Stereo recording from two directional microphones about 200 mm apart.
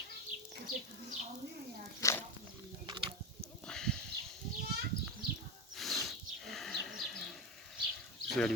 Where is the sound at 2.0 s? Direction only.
15° left (ahead or behind).